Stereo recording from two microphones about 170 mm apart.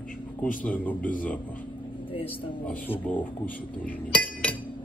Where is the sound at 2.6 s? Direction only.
10° left (ahead or behind).